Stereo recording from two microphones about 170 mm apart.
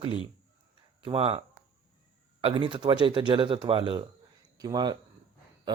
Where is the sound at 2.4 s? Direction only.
30° right (ahead or behind).